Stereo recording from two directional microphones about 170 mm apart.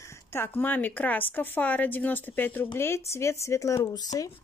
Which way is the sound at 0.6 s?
10° left (ahead or behind).